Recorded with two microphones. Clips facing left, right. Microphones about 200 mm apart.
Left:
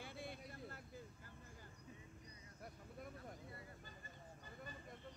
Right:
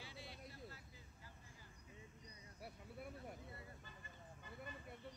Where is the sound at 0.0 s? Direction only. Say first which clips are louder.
Left 5 dB; 55° left (ahead or behind).